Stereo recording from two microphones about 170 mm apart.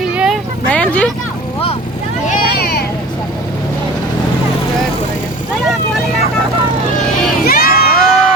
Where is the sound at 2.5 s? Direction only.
65° left (ahead or behind).